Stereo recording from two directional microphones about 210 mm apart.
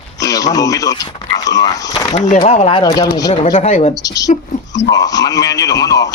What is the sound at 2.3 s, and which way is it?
Speech, 30° left (ahead or behind).